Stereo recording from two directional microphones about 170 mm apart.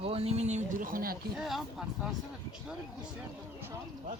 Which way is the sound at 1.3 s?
Centre (ahead or behind).